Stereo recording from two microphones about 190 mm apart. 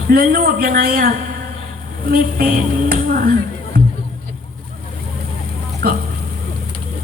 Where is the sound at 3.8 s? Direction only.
50° right (ahead or behind).